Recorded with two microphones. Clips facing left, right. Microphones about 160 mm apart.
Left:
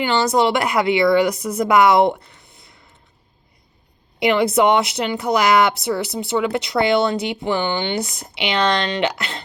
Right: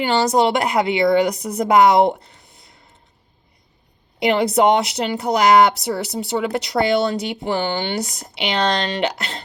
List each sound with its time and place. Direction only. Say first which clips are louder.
0.0 s speech: right 1 dB; 40° right (ahead or behind)
4.3 s speech: even; 35° right (ahead or behind)